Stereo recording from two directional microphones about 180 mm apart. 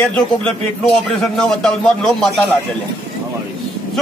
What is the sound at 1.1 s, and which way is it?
A man's voice, centre (ahead or behind).